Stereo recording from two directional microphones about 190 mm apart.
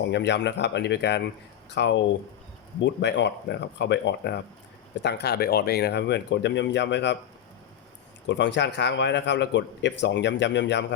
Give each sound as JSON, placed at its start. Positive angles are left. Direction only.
{"t": 0.0, "sound": "speech", "side_deg": 65}
{"t": 8.3, "sound": "speech", "side_deg": 70}